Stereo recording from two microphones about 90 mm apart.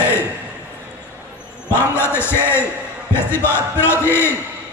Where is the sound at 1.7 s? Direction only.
25° left (ahead or behind).